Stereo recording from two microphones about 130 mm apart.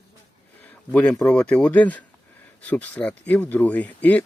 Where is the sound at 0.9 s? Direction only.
10° left (ahead or behind).